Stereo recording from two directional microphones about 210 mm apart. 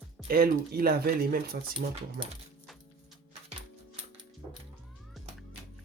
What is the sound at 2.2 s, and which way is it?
Speech, 25° right (ahead or behind).